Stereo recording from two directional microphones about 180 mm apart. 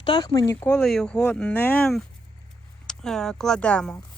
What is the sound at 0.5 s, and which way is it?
Speech, 10° left (ahead or behind).